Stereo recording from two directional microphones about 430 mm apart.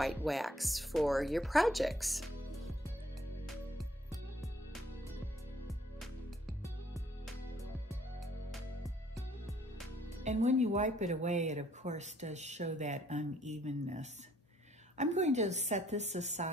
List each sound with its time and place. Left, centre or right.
0.0 s speech: centre
3.4 s music: centre
5.7 s music: centre
10.2 s speech: centre